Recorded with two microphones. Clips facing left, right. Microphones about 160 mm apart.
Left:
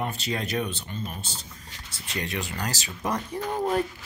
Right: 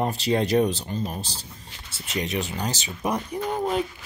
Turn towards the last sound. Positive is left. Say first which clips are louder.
# right 2 dB
turn(degrees=-15)  # may be behind; listen again after turning